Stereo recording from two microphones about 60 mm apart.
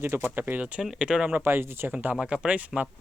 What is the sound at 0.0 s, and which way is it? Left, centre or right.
Speech, right.